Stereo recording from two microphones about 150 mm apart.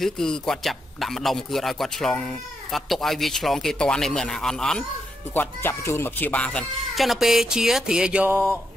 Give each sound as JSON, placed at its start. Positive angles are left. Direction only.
{"t": 0.0, "sound": "speech", "side_deg": 5}
{"t": 5.3, "sound": "speech", "side_deg": 15}